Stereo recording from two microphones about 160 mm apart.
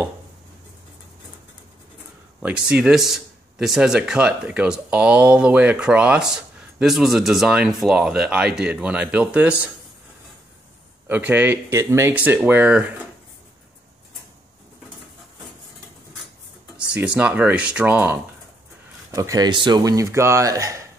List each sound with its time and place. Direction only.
2.4 s speech: 5° right (ahead or behind)
11.1 s speech: 10° right (ahead or behind)
16.9 s speech: 5° right (ahead or behind)